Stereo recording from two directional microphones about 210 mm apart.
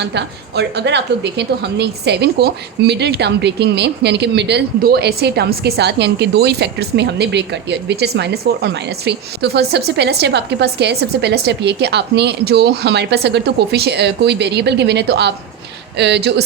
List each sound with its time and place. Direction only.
0.0 s a woman's voice: 55° right (ahead or behind)